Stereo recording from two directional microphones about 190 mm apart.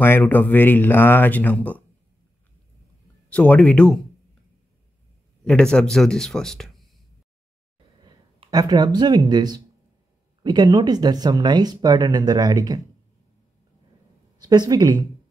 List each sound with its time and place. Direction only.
0.0 s speech: 10° left (ahead or behind)
3.3 s speech: 5° left (ahead or behind)
5.4 s speech: 5° left (ahead or behind)
8.0 s speech: 20° right (ahead or behind)
14.4 s speech: 20° right (ahead or behind)